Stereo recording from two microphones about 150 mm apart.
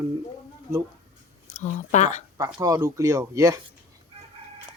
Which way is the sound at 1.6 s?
55° left (ahead or behind).